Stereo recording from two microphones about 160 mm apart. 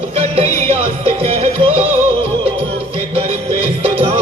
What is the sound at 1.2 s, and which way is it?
Music, 40° right (ahead or behind).